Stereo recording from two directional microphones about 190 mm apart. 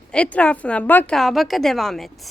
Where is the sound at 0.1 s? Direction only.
5° left (ahead or behind).